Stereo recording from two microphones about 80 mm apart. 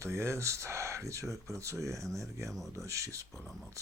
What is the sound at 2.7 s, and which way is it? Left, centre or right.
Speech, right.